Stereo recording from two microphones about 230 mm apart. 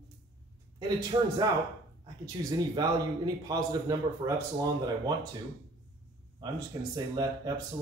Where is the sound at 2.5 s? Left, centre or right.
Centre.